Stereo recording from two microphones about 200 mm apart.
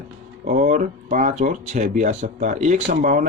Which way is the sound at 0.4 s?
40° right (ahead or behind).